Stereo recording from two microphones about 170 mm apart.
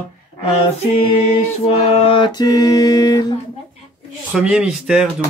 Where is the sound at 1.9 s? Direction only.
30° left (ahead or behind).